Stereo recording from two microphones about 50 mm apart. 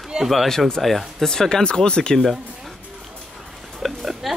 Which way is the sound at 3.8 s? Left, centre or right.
Centre.